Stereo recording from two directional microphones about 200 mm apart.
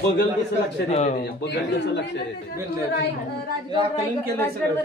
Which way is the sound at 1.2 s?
60° left (ahead or behind).